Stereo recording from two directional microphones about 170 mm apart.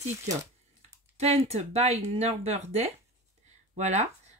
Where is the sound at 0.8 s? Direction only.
40° right (ahead or behind).